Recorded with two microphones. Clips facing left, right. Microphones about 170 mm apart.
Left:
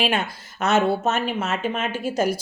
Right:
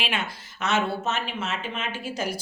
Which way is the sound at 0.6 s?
45° left (ahead or behind).